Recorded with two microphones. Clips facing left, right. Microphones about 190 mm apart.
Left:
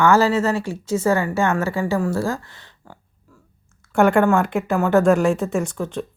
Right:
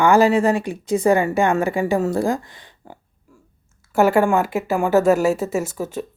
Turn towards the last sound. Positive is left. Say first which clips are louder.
# even
turn(degrees=-5)  # may be behind; listen again after turning